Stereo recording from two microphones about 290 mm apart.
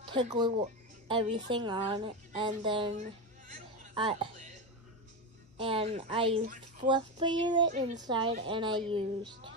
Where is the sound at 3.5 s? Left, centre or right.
Centre.